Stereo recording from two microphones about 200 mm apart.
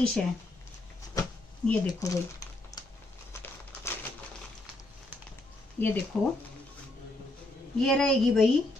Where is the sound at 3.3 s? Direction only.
15° left (ahead or behind).